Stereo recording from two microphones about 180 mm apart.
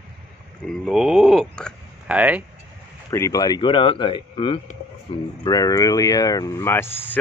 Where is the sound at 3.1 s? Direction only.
20° left (ahead or behind); by 5.2 s 35° left (ahead or behind).